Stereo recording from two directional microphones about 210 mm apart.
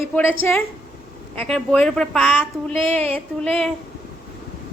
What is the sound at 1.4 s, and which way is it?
A woman's voice, 5° left (ahead or behind).